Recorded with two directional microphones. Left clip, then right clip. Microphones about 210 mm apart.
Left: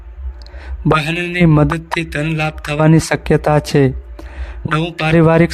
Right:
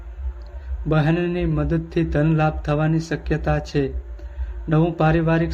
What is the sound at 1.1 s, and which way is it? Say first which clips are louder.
Speech: left 8 dB; 50° left (ahead or behind).